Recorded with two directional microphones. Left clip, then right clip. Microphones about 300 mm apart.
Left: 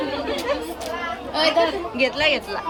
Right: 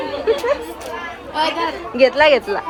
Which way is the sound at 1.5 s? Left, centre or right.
Centre.